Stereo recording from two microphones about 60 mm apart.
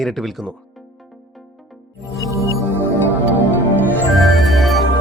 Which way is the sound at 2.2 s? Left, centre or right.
Right.